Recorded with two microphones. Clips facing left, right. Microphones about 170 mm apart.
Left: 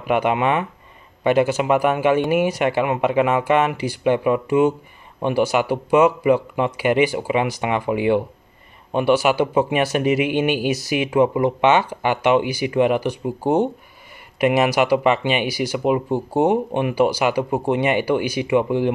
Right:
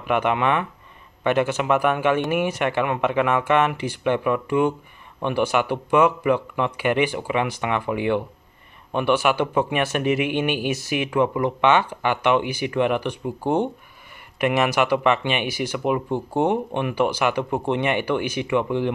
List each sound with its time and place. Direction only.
0.1 s speech: 15° left (ahead or behind)
9.3 s speech: 15° left (ahead or behind)